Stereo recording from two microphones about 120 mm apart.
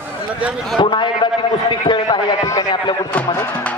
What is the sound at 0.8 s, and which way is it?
A man's voice, 40° left (ahead or behind).